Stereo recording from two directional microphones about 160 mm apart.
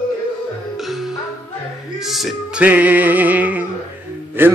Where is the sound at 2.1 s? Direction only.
5° right (ahead or behind).